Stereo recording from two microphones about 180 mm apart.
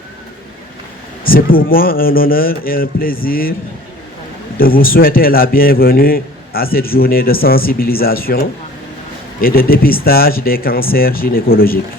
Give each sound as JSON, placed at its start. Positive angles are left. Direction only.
{"t": 1.2, "sound": "a man's voice", "side_deg": 55}
{"t": 4.5, "sound": "a man's voice", "side_deg": 55}